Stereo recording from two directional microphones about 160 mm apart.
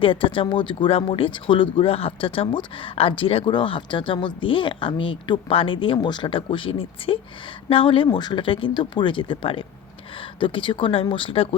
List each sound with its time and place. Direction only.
0.0 s speech: 35° left (ahead or behind)